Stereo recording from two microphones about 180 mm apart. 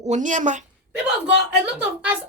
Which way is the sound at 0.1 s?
45° right (ahead or behind).